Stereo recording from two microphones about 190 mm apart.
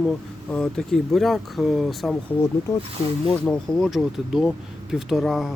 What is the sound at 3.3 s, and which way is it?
Speech, 5° left (ahead or behind).